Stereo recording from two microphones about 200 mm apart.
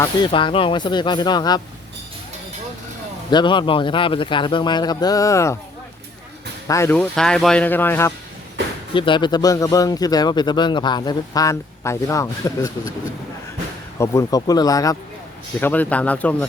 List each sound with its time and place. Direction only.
0.0 s a man's voice: 25° left (ahead or behind)
3.2 s a man's voice: 25° left (ahead or behind)
6.7 s speech: 15° left (ahead or behind)
8.9 s a man's voice: 25° left (ahead or behind)
14.0 s speech: 15° left (ahead or behind)